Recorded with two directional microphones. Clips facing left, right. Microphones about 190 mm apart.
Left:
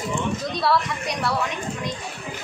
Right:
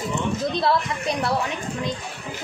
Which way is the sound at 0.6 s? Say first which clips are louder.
Left 3 dB; 25° right (ahead or behind).